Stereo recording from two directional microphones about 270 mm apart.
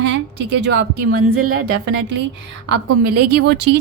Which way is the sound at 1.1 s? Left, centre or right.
Right.